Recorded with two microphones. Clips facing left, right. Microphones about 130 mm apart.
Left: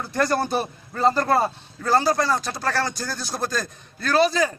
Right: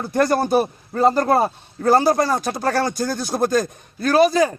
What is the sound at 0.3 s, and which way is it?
Speech, 45° right (ahead or behind).